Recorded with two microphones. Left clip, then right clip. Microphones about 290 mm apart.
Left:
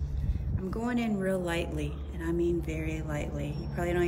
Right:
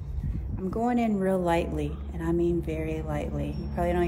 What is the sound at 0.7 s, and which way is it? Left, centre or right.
A woman's voice, centre.